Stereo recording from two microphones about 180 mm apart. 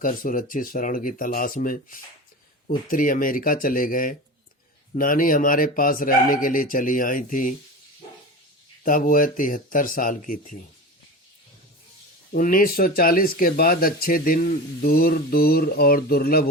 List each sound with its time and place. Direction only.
0.0 s speech: 50° left (ahead or behind)
8.8 s speech: 50° left (ahead or behind)
12.3 s speech: 50° left (ahead or behind)